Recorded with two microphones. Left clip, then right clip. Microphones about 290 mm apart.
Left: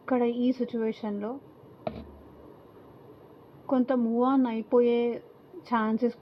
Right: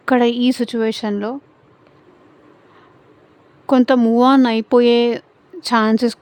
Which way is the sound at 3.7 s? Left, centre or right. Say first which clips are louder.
Right 13 dB; right.